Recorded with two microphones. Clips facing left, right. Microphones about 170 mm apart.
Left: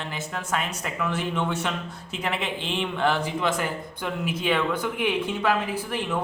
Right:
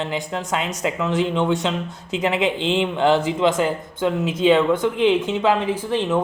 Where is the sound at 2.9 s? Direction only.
25° right (ahead or behind).